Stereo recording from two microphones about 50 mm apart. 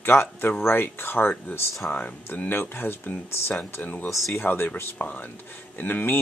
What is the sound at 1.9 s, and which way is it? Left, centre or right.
Speech, left.